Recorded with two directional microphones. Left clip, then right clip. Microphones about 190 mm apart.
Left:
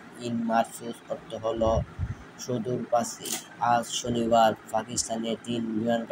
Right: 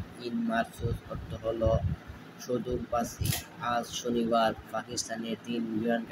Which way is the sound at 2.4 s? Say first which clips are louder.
Left 2 dB; 15° left (ahead or behind).